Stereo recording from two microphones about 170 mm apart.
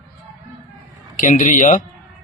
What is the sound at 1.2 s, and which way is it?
Speech, 50° left (ahead or behind).